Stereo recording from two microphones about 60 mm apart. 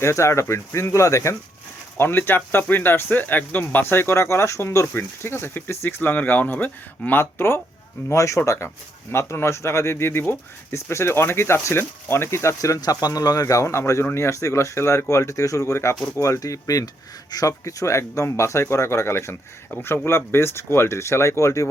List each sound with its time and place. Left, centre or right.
0.0 s speech: left
2.0 s speech: left
4.9 s speech: left
8.1 s speech: left
9.1 s speech: left
16.1 s speech: left